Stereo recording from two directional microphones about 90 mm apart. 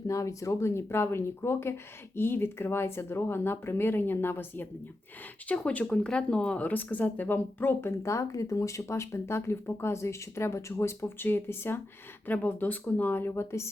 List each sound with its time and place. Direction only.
0.1 s speech: 35° left (ahead or behind)